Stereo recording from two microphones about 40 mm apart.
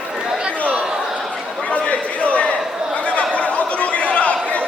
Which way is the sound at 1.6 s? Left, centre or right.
Left.